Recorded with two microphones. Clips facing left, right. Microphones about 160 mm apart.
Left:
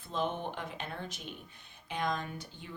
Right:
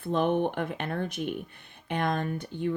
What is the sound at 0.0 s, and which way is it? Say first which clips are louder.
Speech: right 9 dB; 60° right (ahead or behind).